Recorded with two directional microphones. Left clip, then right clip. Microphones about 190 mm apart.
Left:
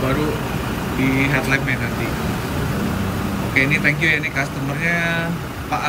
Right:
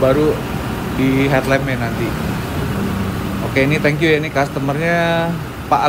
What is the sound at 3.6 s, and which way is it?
Speech, 20° right (ahead or behind).